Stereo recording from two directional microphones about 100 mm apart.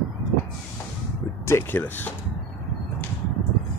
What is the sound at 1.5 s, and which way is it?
Speech, 20° left (ahead or behind).